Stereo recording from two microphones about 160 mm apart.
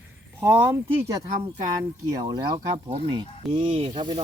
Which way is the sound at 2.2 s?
25° right (ahead or behind).